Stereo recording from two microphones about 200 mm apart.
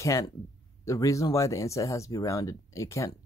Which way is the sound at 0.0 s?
15° left (ahead or behind).